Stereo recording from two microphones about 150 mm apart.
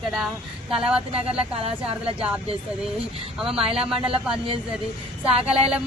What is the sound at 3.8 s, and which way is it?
Speech, 5° right (ahead or behind).